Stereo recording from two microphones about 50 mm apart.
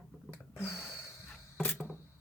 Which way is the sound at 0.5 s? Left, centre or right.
Left.